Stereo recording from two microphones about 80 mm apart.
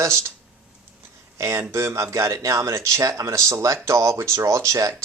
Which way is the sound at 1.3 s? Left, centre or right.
Right.